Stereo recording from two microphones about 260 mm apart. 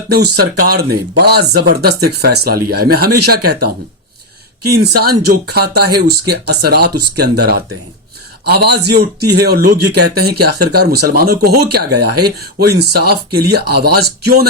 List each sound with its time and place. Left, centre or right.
0.1 s speech: right
5.3 s speech: right